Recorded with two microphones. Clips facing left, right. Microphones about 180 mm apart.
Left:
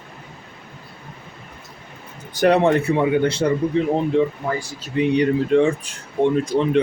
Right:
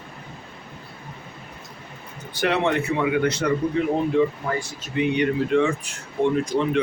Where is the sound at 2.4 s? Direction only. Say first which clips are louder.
Left 6 dB; 40° left (ahead or behind).